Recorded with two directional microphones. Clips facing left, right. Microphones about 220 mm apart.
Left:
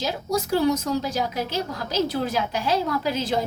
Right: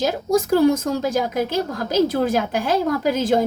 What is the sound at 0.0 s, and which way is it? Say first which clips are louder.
A woman's voice: right 7 dB; 50° right (ahead or behind).